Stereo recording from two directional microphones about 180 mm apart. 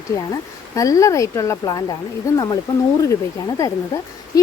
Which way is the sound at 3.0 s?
20° left (ahead or behind).